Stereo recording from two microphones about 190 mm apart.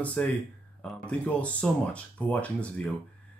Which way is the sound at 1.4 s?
5° left (ahead or behind).